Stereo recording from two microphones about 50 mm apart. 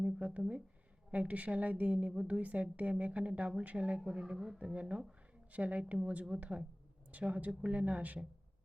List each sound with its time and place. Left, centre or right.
0.0 s a woman's voice: right